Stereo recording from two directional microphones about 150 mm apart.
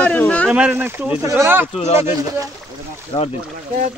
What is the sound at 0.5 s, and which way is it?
A man's voice, 10° right (ahead or behind).